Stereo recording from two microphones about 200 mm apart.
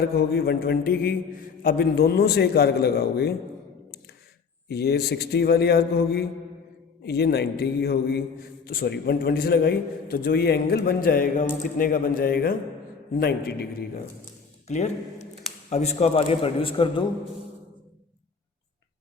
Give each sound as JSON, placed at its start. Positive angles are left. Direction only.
{"t": 0.2, "sound": "a man's voice", "side_deg": 55}
{"t": 4.7, "sound": "a man's voice", "side_deg": 55}
{"t": 14.7, "sound": "a man's voice", "side_deg": 35}